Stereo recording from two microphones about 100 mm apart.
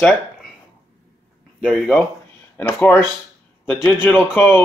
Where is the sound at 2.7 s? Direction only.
20° left (ahead or behind).